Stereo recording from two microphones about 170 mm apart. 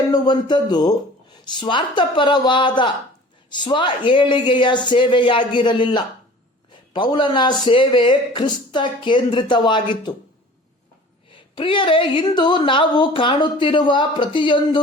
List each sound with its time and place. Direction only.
0.1 s a woman's voice: 25° left (ahead or behind)
11.3 s a woman's voice: 30° left (ahead or behind)